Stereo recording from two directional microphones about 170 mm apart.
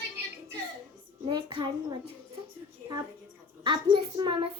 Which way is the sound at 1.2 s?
25° right (ahead or behind).